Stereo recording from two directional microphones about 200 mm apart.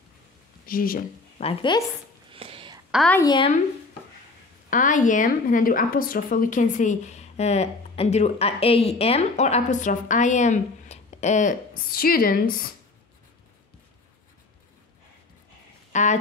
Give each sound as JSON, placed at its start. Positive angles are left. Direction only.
{"t": 0.7, "sound": "speech", "side_deg": 45}
{"t": 1.4, "sound": "speech", "side_deg": 25}
{"t": 2.3, "sound": "a sound", "side_deg": -25}
{"t": 2.9, "sound": "a woman's voice", "side_deg": 0}
{"t": 3.2, "sound": "speech", "side_deg": 25}
{"t": 4.6, "sound": "a woman's voice", "side_deg": 40}
{"t": 15.9, "sound": "speech", "side_deg": 35}